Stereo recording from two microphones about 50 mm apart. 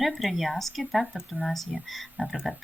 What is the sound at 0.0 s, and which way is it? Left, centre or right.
Speech, centre.